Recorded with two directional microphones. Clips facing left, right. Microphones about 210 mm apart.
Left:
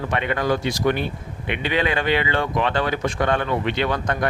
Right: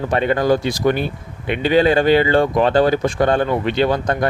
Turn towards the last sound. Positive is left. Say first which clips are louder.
# right 5 dB
turn(degrees=-35)  # may be behind; listen again after turning